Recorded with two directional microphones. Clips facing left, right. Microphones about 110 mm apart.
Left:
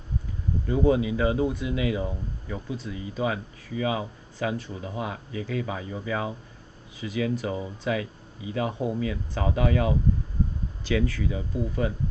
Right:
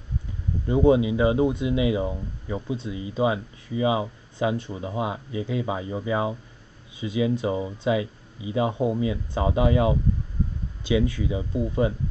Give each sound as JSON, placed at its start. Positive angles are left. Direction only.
{"t": 0.7, "sound": "speech", "side_deg": -20}